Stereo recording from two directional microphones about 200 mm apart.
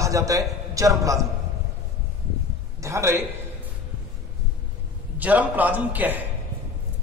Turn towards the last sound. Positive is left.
turn(degrees=-10)  # may be behind; listen again after turning